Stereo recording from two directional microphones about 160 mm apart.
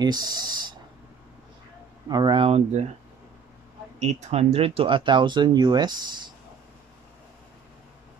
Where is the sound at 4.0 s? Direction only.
45° right (ahead or behind); by 6.3 s 30° right (ahead or behind).